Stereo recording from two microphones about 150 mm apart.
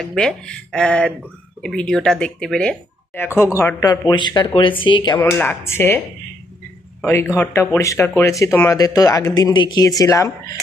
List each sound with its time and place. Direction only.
0.2 s speech: 5° left (ahead or behind)
3.2 s speech: 15° left (ahead or behind); by 5.2 s 30° left (ahead or behind)
5.2 s speech: 15° left (ahead or behind)
7.0 s speech: 15° left (ahead or behind)